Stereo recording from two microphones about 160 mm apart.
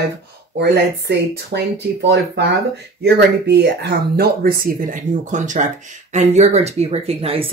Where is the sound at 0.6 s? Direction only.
90° right.